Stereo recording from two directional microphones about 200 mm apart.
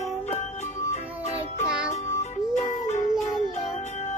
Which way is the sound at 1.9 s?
35° left (ahead or behind).